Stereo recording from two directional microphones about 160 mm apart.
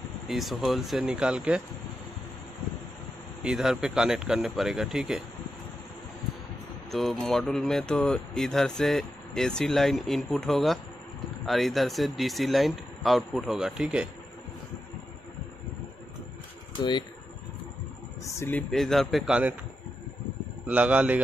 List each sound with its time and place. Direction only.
0.3 s speech: centre (ahead or behind)
3.4 s speech: centre (ahead or behind)
6.9 s speech: centre (ahead or behind)
18.2 s a sound: 15° left (ahead or behind)
18.7 s speech: centre (ahead or behind)
20.6 s a man's voice: 10° right (ahead or behind)